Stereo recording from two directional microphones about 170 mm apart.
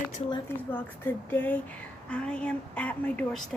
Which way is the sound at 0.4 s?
10° left (ahead or behind).